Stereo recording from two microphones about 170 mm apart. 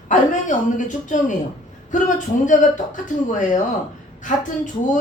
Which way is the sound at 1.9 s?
50° left (ahead or behind).